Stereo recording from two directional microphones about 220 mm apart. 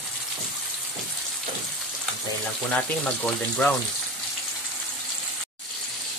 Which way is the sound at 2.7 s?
5° left (ahead or behind).